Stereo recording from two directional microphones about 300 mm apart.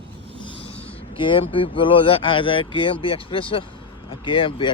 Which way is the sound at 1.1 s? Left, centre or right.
Centre.